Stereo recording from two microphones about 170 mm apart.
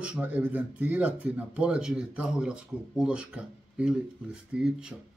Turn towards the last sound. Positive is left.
turn(degrees=-5)  # may be behind; listen again after turning